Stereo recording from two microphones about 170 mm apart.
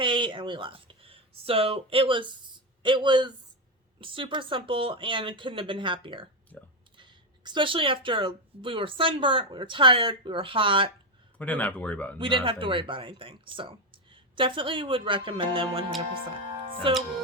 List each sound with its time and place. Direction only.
0.0 s speech: 30° right (ahead or behind)
11.3 s speech: 10° left (ahead or behind)
12.2 s speech: 30° right (ahead or behind)
16.9 s speech: 30° right (ahead or behind)